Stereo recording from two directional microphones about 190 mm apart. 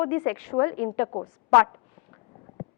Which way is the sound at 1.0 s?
25° left (ahead or behind).